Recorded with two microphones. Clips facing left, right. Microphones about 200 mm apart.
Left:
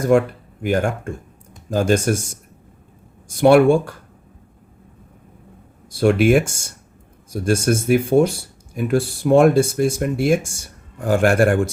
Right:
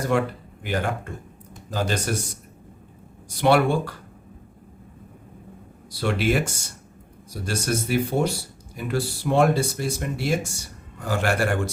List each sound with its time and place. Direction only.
0.6 s speech: 45° left (ahead or behind)
5.9 s speech: 50° left (ahead or behind)